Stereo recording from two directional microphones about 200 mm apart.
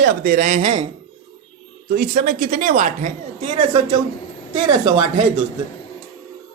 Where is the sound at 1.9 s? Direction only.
50° right (ahead or behind).